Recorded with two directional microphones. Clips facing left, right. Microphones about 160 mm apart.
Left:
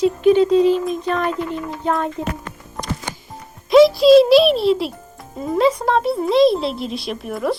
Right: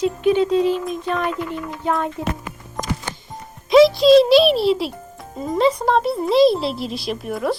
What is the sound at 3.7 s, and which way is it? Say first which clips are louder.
A child's voice: left 1 dB; centre (ahead or behind).